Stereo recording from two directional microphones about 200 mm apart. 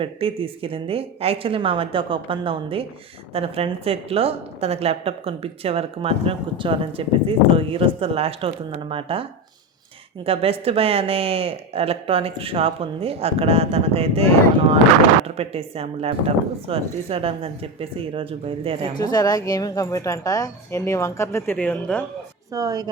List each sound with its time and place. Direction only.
0.0 s a woman's voice: 25° right (ahead or behind)
10.2 s a woman's voice: 30° right (ahead or behind)
15.4 s a woman's voice: 30° right (ahead or behind)
18.9 s a woman's voice: 20° left (ahead or behind)
22.5 s speech: 20° right (ahead or behind)